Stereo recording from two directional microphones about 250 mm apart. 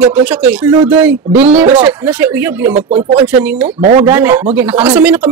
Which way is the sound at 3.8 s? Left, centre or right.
Right.